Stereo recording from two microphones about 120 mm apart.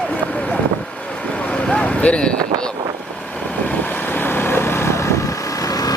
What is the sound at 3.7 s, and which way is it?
Vehicle, 15° left (ahead or behind).